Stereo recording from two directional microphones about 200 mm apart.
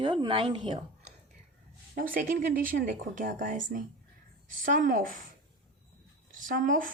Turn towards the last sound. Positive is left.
turn(degrees=-45)  # may be behind; listen again after turning